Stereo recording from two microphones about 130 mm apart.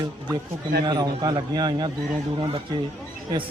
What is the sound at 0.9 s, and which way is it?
A man's voice, 30° right (ahead or behind).